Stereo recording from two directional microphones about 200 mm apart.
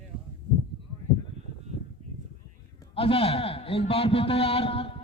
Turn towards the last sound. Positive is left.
turn(degrees=30)  # may be behind; listen again after turning